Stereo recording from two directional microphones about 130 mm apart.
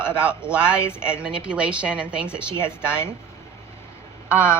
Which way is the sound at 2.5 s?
20° left (ahead or behind).